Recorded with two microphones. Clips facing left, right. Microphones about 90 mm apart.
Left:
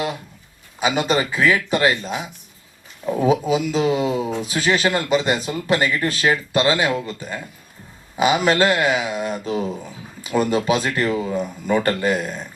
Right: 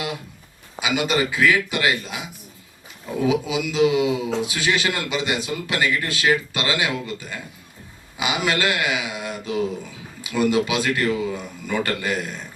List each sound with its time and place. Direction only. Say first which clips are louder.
0.8 s speech: left 2 dB; 40° left (ahead or behind)
3.2 s speech: left 3 dB; 40° left (ahead or behind)